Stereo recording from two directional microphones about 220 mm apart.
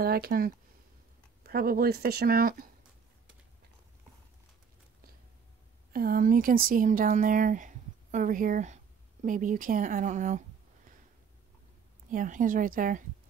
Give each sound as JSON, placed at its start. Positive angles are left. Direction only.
{"t": 0.0, "sound": "speech", "side_deg": -45}
{"t": 5.9, "sound": "speech", "side_deg": -40}
{"t": 12.1, "sound": "a woman's voice", "side_deg": -35}